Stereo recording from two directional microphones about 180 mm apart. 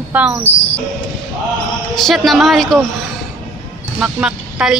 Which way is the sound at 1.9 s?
Centre (ahead or behind).